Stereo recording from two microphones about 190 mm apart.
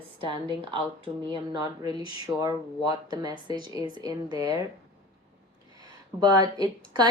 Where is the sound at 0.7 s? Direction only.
25° right (ahead or behind).